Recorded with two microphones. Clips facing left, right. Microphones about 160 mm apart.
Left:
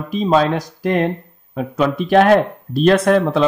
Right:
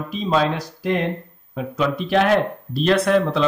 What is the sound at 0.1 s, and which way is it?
A man's voice, 45° left (ahead or behind).